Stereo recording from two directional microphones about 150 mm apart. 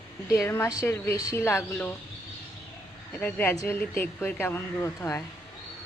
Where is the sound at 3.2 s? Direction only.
10° left (ahead or behind).